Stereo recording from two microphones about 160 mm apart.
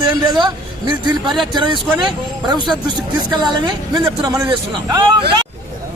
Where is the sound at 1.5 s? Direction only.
30° right (ahead or behind).